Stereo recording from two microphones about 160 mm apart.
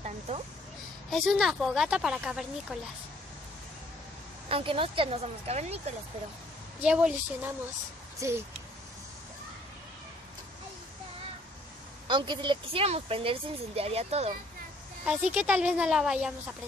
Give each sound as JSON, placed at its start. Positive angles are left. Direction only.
{"t": 1.1, "sound": "speech", "side_deg": 0}
{"t": 4.5, "sound": "speech", "side_deg": -35}
{"t": 6.8, "sound": "a woman's voice", "side_deg": -5}
{"t": 12.1, "sound": "speech", "side_deg": -30}
{"t": 15.3, "sound": "speech", "side_deg": -10}